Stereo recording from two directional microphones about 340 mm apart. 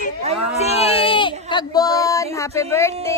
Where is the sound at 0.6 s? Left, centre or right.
Centre.